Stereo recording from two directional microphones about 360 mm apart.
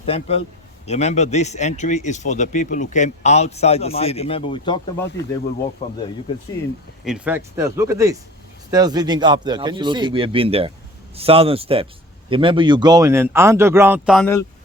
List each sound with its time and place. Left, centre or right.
0.0 s a man's voice: centre
7.0 s speech: centre